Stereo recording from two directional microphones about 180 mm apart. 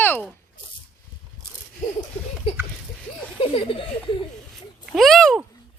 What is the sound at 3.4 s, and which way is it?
Speech, 30° left (ahead or behind).